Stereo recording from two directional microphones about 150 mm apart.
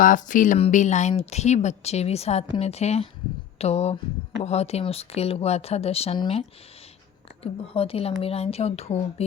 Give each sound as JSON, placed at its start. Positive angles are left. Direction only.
{"t": 0.0, "sound": "speech", "side_deg": 60}
{"t": 7.4, "sound": "speech", "side_deg": 40}